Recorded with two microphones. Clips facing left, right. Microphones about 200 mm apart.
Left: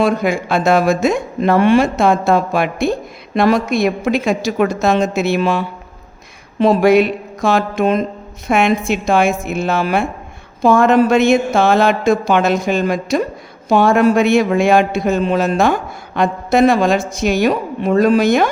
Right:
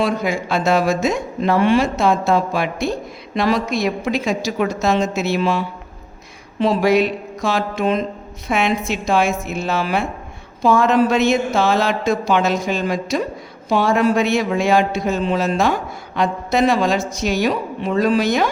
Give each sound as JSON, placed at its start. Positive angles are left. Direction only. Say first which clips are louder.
{"t": 0.0, "sound": "a woman's voice", "louder": "left 4 dB", "side_deg": 55}